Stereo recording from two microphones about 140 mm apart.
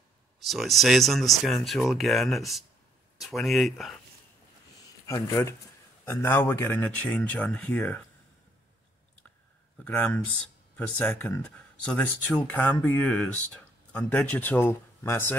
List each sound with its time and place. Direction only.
0.4 s speech: centre (ahead or behind)
5.0 s speech: 20° left (ahead or behind)
9.8 s speech: 10° left (ahead or behind)